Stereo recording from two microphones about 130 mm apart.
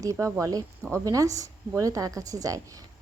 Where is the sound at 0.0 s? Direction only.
25° right (ahead or behind).